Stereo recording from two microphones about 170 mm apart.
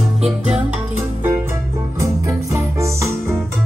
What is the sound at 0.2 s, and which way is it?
Music, 5° right (ahead or behind).